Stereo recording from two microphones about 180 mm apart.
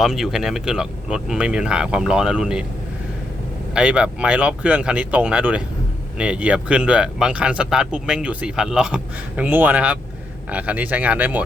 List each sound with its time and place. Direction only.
0.0 s speech: centre (ahead or behind)
3.8 s speech: 5° right (ahead or behind)